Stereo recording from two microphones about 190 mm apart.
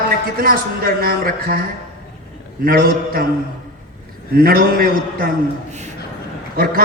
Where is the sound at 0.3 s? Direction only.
50° right (ahead or behind).